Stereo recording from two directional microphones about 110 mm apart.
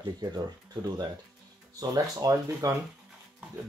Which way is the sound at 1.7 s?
35° right (ahead or behind).